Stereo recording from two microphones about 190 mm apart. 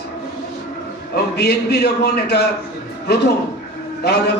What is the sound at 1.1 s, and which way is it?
Speech, 60° left (ahead or behind).